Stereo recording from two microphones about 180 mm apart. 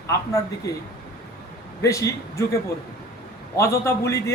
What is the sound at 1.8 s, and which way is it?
Speech, 15° left (ahead or behind).